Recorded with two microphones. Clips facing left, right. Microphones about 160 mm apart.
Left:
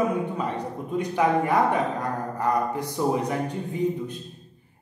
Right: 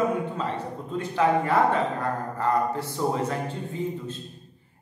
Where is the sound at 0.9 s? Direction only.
15° left (ahead or behind).